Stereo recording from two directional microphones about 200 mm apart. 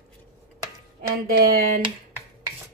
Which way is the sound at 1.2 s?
50° right (ahead or behind).